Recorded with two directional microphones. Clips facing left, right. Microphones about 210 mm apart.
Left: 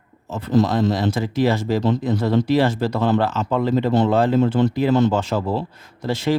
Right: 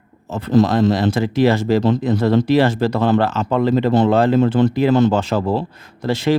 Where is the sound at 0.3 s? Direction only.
75° right (ahead or behind).